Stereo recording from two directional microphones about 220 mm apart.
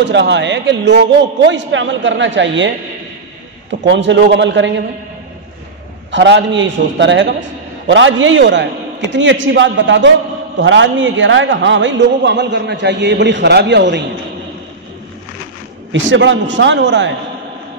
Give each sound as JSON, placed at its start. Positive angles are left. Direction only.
{"t": 0.0, "sound": "a man's voice", "side_deg": -55}
{"t": 3.8, "sound": "a man's voice", "side_deg": -55}
{"t": 6.1, "sound": "a man's voice", "side_deg": -55}
{"t": 15.9, "sound": "a man's voice", "side_deg": -55}